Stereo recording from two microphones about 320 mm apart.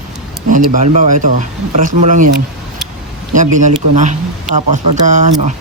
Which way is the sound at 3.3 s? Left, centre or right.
Right.